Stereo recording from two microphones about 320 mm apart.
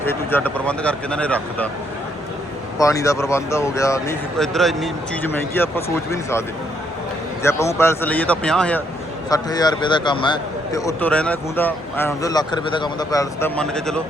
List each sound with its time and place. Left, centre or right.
0.0 s speech: centre
2.7 s a man's voice: centre
7.4 s a man's voice: centre